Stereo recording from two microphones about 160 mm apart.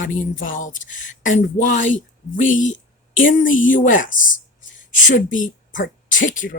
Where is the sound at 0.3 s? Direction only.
55° left (ahead or behind).